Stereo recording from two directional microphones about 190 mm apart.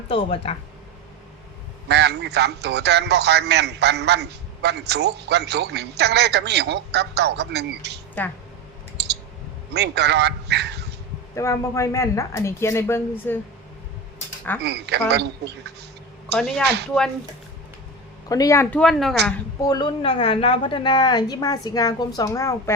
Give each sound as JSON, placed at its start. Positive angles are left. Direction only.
{"t": 0.1, "sound": "speech", "side_deg": 30}
{"t": 1.9, "sound": "a man's voice", "side_deg": -65}
{"t": 9.7, "sound": "a man's voice", "side_deg": -60}
{"t": 11.3, "sound": "a woman's voice", "side_deg": 15}
{"t": 14.6, "sound": "a man's voice", "side_deg": -60}
{"t": 16.3, "sound": "a woman's voice", "side_deg": 0}
{"t": 16.6, "sound": "a man's voice", "side_deg": -60}
{"t": 18.3, "sound": "a woman's voice", "side_deg": 20}
{"t": 19.6, "sound": "a woman's voice", "side_deg": 20}